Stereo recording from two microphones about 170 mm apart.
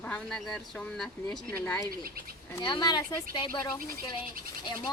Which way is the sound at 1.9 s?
60° right (ahead or behind).